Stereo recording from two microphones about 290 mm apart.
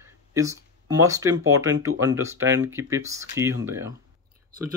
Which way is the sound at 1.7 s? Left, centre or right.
Right.